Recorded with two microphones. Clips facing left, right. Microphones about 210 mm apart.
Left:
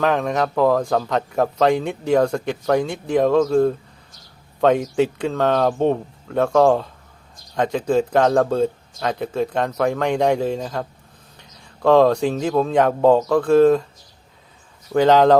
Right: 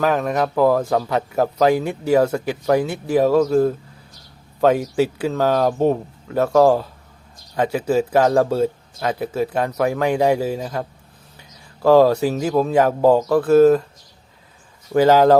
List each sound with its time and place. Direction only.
0.0 s speech: 5° right (ahead or behind)
14.9 s speech: 5° right (ahead or behind)